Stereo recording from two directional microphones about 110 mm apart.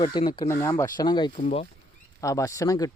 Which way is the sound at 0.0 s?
45° left (ahead or behind).